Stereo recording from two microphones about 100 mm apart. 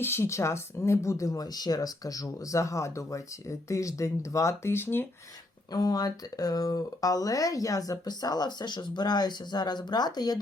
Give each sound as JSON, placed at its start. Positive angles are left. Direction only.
{"t": 0.0, "sound": "speech", "side_deg": 25}
{"t": 5.7, "sound": "speech", "side_deg": 40}